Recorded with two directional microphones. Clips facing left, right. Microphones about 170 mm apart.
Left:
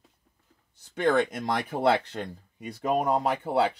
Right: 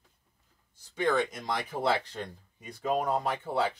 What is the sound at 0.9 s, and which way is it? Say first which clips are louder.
Speech: left 4 dB; 60° left (ahead or behind).